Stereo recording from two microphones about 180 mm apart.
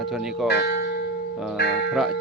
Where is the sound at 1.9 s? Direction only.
Centre (ahead or behind).